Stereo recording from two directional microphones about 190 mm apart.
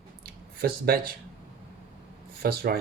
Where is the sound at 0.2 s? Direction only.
50° right (ahead or behind).